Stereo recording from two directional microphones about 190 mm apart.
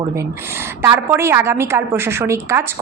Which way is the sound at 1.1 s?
15° right (ahead or behind).